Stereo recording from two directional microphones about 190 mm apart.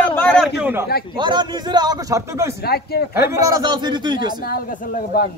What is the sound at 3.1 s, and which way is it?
A man's voice, 15° right (ahead or behind).